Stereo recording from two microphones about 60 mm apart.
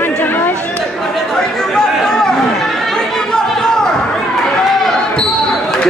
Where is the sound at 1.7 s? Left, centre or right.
Centre.